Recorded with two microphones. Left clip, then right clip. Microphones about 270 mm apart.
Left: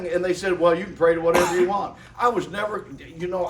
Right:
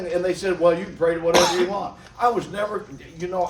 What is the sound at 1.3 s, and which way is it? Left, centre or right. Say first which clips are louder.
Speech: right 2 dB; right.